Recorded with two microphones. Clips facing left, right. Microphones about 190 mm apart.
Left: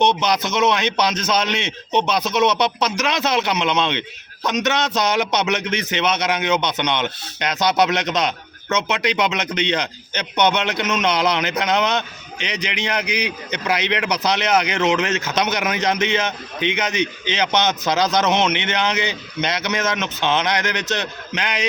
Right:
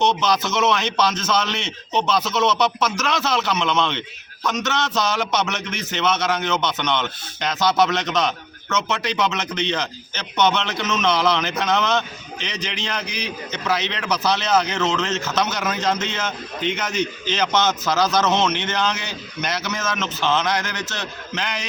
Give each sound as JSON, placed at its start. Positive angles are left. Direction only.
{"t": 0.0, "sound": "a man's voice", "side_deg": 15}
{"t": 18.5, "sound": "speech", "side_deg": 70}
{"t": 19.0, "sound": "a man's voice", "side_deg": 20}